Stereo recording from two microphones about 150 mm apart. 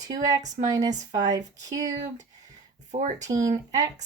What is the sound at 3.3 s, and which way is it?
Speech, 20° right (ahead or behind).